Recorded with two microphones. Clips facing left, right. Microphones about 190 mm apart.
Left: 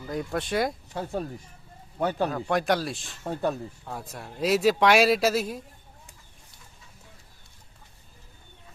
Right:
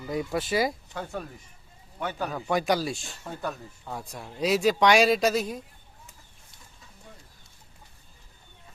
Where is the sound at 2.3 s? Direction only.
Centre (ahead or behind).